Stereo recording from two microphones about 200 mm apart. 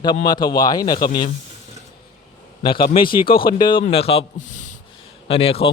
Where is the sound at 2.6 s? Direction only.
25° left (ahead or behind).